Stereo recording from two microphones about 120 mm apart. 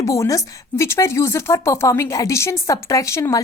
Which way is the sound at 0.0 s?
25° left (ahead or behind).